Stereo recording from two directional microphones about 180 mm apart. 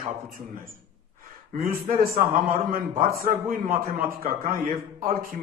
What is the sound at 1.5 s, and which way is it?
A man's voice, 55° right (ahead or behind).